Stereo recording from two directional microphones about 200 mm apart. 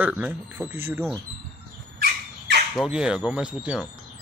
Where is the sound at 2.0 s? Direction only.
55° right (ahead or behind).